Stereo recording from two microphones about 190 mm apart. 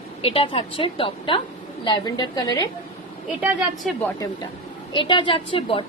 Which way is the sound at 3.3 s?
5° right (ahead or behind).